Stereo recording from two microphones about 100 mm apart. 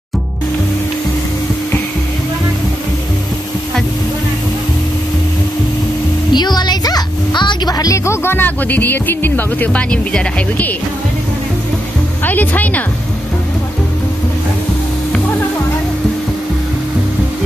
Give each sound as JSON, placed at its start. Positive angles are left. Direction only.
{"t": 6.3, "sound": "music", "side_deg": 45}
{"t": 12.3, "sound": "speech", "side_deg": 15}